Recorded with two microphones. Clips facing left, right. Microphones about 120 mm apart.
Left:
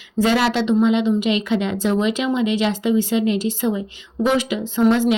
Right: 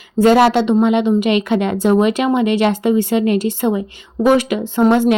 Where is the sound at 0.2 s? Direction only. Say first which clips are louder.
Right 7 dB; 50° right (ahead or behind).